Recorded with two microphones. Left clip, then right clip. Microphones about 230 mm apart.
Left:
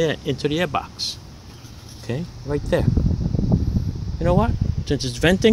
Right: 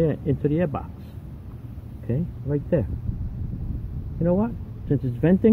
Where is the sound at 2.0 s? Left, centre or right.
Centre.